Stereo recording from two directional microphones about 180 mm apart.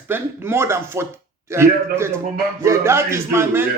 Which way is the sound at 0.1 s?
15° right (ahead or behind).